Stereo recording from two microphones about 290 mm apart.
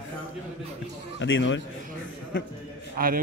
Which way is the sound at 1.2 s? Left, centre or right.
Left.